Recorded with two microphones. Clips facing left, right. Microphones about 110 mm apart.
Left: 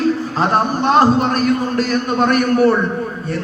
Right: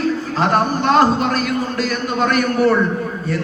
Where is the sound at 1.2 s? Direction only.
45° left (ahead or behind).